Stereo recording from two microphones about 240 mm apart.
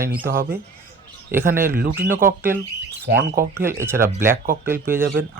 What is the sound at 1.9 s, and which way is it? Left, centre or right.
Speech, centre.